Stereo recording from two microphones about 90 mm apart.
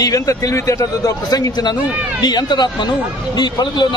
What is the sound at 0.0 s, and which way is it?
Speech, 40° left (ahead or behind).